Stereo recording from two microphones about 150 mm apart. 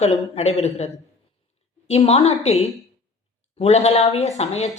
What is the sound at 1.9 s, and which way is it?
Speech, 45° left (ahead or behind).